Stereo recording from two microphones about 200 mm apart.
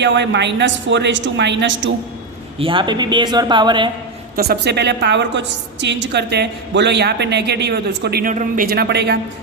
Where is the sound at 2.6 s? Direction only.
25° right (ahead or behind).